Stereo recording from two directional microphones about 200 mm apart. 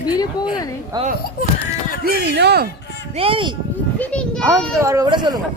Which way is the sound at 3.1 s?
25° right (ahead or behind).